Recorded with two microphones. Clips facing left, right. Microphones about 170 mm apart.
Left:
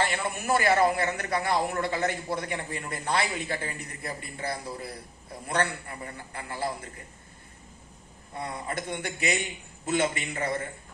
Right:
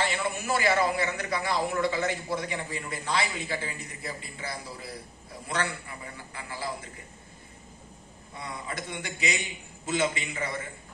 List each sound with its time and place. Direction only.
0.0 s a man's voice: 50° left (ahead or behind)
6.1 s a man's voice: 55° left (ahead or behind)
8.4 s a man's voice: 50° left (ahead or behind)